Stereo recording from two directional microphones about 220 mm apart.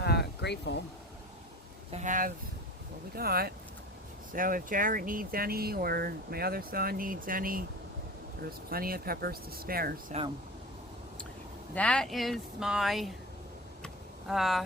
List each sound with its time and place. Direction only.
0.0 s a sound: 50° left (ahead or behind)
1.9 s speech: 35° right (ahead or behind)
11.7 s speech: 5° left (ahead or behind)
13.8 s vehicle: centre (ahead or behind)